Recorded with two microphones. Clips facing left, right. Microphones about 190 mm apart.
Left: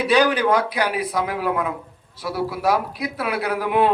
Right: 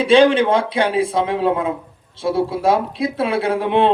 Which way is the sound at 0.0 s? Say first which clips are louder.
Right 6 dB; 25° right (ahead or behind).